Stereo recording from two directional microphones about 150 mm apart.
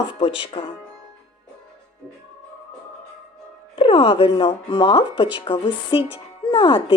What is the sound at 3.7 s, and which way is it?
Speech, 35° left (ahead or behind).